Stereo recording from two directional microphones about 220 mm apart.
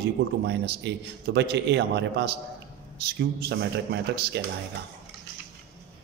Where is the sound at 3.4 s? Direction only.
50° right (ahead or behind).